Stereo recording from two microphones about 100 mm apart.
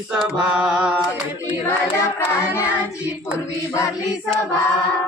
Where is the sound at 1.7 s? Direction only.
25° left (ahead or behind).